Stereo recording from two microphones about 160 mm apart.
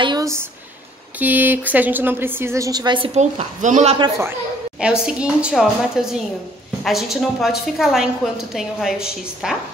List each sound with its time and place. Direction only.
0.0 s a sound: 25° right (ahead or behind)
1.2 s a woman's voice: 10° right (ahead or behind); by 3.1 s 30° right (ahead or behind)
3.2 s a woman's voice: 50° right (ahead or behind)
4.2 s a woman's voice: 10° right (ahead or behind)